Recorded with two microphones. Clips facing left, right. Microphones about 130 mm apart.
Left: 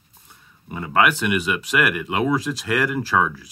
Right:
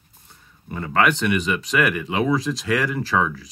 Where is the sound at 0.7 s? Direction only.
10° left (ahead or behind).